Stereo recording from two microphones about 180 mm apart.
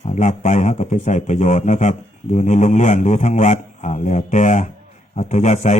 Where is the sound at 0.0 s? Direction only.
40° left (ahead or behind).